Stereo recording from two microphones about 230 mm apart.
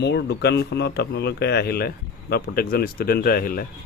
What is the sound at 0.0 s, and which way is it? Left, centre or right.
Speech, left.